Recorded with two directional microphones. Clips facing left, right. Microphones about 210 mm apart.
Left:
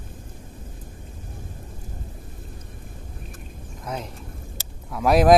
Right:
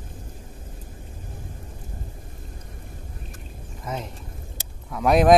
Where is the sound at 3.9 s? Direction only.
Centre (ahead or behind).